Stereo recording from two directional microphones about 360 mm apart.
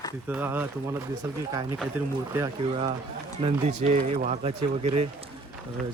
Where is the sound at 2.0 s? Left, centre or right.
Centre.